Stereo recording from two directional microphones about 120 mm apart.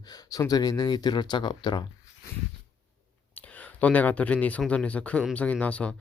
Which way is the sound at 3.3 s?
15° left (ahead or behind).